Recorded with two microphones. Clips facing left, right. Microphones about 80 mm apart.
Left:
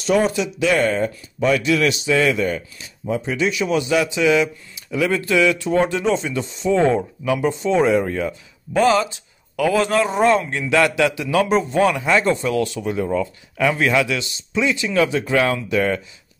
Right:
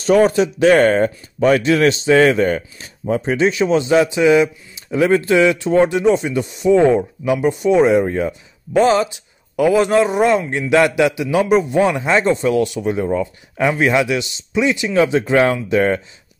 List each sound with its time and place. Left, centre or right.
0.0 s speech: right